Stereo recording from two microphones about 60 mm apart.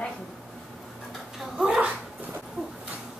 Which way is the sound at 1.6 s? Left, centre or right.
Centre.